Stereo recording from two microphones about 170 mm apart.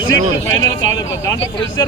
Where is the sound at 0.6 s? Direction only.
20° left (ahead or behind).